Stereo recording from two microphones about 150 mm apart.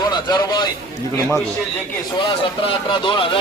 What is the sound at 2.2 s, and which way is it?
Speech, 35° left (ahead or behind).